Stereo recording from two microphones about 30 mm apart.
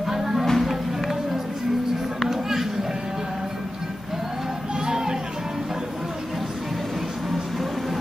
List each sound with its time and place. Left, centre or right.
0.1 s music: centre
2.2 s a sound: centre
4.7 s children playing: centre